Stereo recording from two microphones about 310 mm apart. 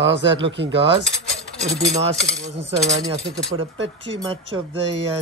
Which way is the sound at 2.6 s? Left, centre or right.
Centre.